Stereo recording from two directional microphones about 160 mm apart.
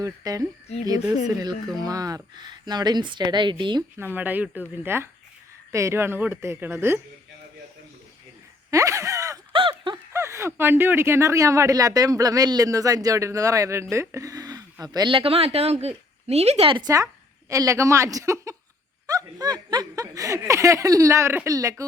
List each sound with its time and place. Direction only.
0.0 s speech: 20° right (ahead or behind)
1.8 s speech: 25° right (ahead or behind)
3.9 s speech: 10° right (ahead or behind)
8.7 s a sound: 20° right (ahead or behind)
9.5 s a sound: 30° right (ahead or behind)
10.1 s speech: 20° right (ahead or behind)